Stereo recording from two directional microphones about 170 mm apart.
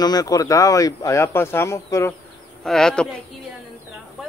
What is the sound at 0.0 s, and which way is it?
Speech, 20° left (ahead or behind).